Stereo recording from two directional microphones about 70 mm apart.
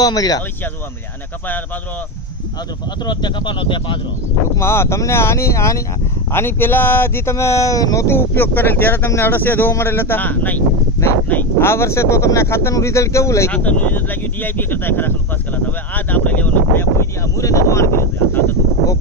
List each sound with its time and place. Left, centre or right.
0.0 s speech: left
3.1 s speech: left
4.6 s speech: left
6.3 s speech: left
8.1 s speech: left
11.6 s speech: left
13.5 s speech: left
17.4 s speech: left